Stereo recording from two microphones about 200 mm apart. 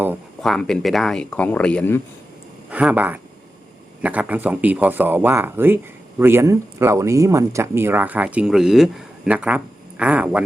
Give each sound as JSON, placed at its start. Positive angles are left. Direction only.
{"t": 0.4, "sound": "speech", "side_deg": 0}
{"t": 2.6, "sound": "speech", "side_deg": -5}